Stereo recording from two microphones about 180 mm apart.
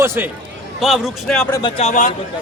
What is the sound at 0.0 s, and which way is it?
Speech, 15° right (ahead or behind).